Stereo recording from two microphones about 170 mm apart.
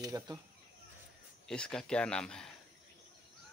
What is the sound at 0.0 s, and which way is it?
Speech, 20° right (ahead or behind).